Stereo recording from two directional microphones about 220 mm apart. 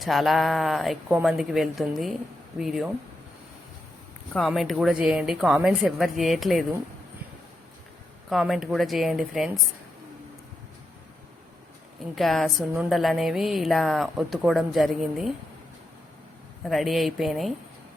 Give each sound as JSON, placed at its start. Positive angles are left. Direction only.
{"t": 0.0, "sound": "speech", "side_deg": 0}
{"t": 4.4, "sound": "speech", "side_deg": 0}
{"t": 8.3, "sound": "speech", "side_deg": 0}
{"t": 12.1, "sound": "speech", "side_deg": 0}
{"t": 16.6, "sound": "speech", "side_deg": 0}